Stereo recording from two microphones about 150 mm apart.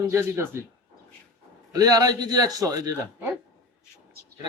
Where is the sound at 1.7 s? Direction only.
25° right (ahead or behind).